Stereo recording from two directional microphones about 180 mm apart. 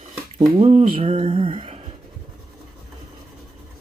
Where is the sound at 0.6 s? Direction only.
35° right (ahead or behind).